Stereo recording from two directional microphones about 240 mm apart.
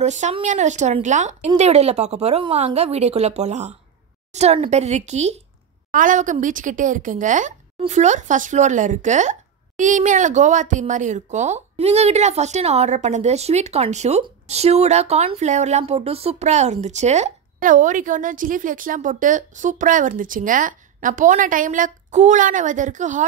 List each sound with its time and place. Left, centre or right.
0.0 s speech: right